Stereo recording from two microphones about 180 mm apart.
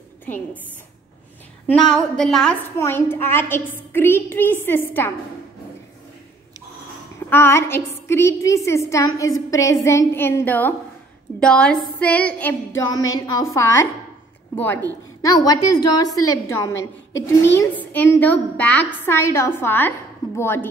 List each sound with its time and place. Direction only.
1.7 s a woman's voice: 5° left (ahead or behind)
2.8 s a woman's voice: 15° left (ahead or behind)
7.2 s a woman's voice: 10° left (ahead or behind)
16.7 s a woman's voice: 90° left
17.6 s a woman's voice: 10° left (ahead or behind)